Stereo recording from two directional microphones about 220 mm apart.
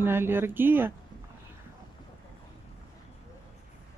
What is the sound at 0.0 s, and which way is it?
Speech, 10° right (ahead or behind).